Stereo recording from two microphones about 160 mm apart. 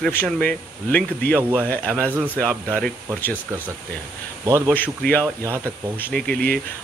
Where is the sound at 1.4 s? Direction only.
15° right (ahead or behind).